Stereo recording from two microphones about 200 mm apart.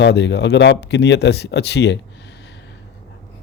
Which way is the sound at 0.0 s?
60° left (ahead or behind).